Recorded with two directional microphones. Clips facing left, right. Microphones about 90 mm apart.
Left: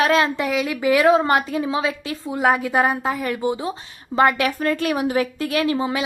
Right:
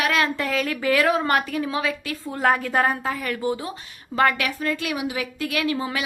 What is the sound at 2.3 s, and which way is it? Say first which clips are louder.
A woman's voice: left 2 dB; 10° left (ahead or behind).